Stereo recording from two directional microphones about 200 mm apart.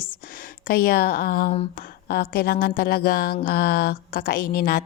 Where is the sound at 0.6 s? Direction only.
45° left (ahead or behind).